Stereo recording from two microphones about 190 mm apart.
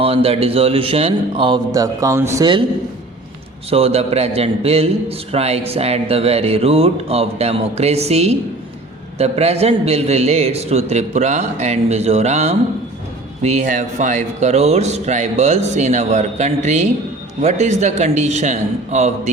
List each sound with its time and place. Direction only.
0.0 s a man's voice: 30° right (ahead or behind)
3.7 s a man's voice: 30° right (ahead or behind)